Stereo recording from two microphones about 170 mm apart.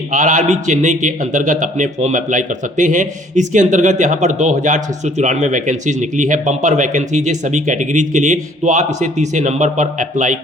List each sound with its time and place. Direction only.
0.1 s a man's voice: 50° right (ahead or behind)